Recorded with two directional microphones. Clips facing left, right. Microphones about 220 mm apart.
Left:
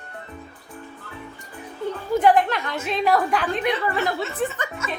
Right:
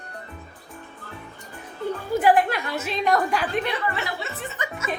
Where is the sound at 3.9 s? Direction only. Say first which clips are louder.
Left 6 dB; 50° left (ahead or behind).